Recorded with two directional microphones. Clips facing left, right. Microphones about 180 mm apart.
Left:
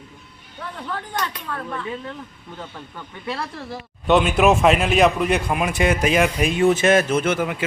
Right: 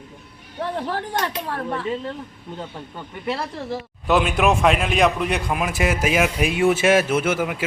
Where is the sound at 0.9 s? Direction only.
75° right (ahead or behind).